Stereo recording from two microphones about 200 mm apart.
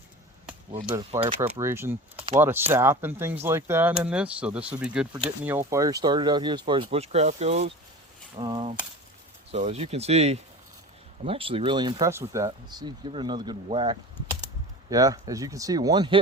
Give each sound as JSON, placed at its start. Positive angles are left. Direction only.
{"t": 1.4, "sound": "speech", "side_deg": -15}
{"t": 2.1, "sound": "speech", "side_deg": -25}
{"t": 2.4, "sound": "speech", "side_deg": -10}
{"t": 9.5, "sound": "speech", "side_deg": -35}